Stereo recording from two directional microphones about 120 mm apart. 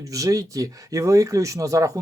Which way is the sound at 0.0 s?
30° right (ahead or behind).